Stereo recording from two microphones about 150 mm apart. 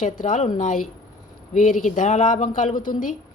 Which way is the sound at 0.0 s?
60° left (ahead or behind).